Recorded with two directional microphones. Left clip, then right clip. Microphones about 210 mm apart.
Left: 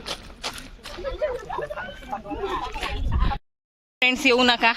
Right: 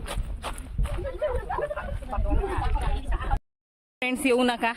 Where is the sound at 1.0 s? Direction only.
45° left (ahead or behind).